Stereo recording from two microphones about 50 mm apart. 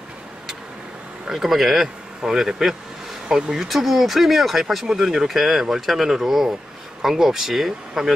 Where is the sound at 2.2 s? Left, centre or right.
Centre.